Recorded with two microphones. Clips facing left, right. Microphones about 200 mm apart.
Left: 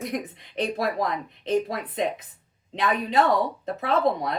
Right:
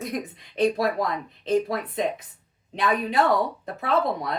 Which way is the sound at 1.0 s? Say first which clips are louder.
Even; 20° left (ahead or behind).